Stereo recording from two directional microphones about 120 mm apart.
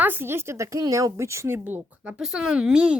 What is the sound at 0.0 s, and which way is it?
Speech, 20° right (ahead or behind).